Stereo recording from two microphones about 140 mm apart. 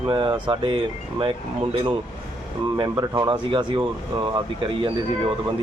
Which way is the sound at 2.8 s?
30° right (ahead or behind).